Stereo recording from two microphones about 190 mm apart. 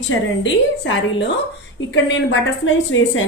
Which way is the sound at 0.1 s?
85° left.